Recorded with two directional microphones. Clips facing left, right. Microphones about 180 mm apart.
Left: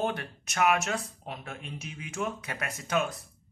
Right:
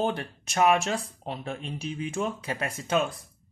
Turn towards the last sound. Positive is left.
turn(degrees=-30)  # may be behind; listen again after turning